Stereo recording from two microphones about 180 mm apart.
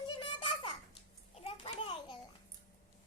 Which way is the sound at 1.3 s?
35° left (ahead or behind).